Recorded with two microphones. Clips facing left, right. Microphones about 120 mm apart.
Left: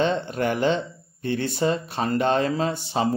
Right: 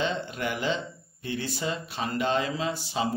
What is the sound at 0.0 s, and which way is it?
Speech, 50° left (ahead or behind).